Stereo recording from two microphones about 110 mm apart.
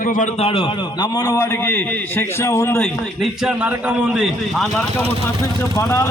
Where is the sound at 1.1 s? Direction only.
30° left (ahead or behind).